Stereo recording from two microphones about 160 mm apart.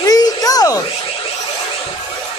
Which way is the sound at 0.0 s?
25° left (ahead or behind).